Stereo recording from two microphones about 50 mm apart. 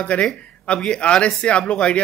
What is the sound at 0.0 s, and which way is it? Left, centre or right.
Speech, left.